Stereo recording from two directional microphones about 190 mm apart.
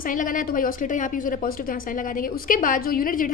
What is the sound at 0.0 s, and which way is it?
A woman's voice, 45° left (ahead or behind).